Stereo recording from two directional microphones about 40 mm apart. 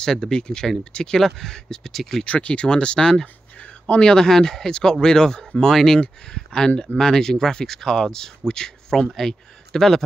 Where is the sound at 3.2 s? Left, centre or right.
Left.